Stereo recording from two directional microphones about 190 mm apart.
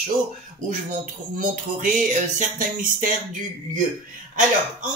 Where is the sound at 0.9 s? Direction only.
45° right (ahead or behind).